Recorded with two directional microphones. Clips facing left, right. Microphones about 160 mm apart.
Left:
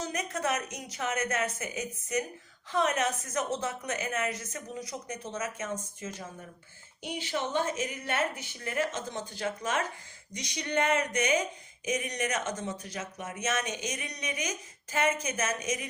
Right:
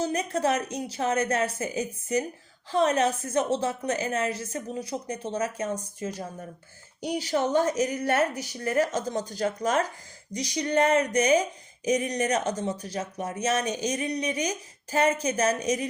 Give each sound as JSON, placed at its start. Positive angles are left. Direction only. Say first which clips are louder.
{"t": 0.0, "sound": "speech", "louder": "right 7 dB", "side_deg": -30}